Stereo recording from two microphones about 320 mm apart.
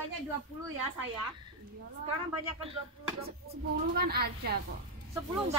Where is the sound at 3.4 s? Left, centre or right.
Right.